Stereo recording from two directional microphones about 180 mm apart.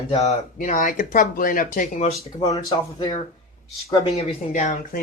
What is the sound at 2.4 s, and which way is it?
Speech, 20° left (ahead or behind).